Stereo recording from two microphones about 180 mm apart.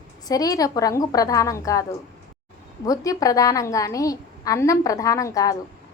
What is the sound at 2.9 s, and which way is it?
A woman's voice, 20° left (ahead or behind).